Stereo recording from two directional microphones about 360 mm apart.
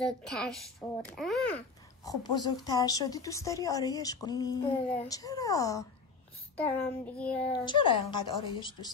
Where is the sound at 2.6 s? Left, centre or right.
Centre.